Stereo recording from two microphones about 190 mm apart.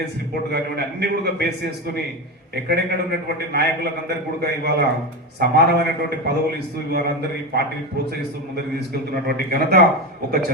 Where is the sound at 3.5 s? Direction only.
60° right (ahead or behind).